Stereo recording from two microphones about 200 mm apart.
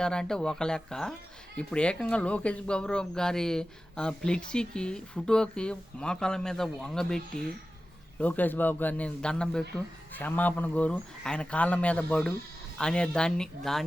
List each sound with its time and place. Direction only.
0.0 s speech: 5° left (ahead or behind)
8.2 s speech: 10° left (ahead or behind)